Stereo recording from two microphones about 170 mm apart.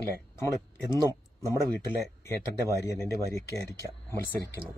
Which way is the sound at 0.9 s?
15° left (ahead or behind).